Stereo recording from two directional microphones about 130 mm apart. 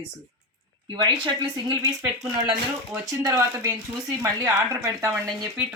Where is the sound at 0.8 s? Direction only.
35° right (ahead or behind).